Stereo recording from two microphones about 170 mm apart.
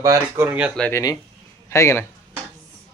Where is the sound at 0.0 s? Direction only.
15° right (ahead or behind).